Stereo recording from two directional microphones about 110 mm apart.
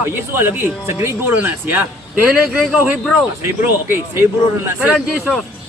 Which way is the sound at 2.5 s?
5° right (ahead or behind).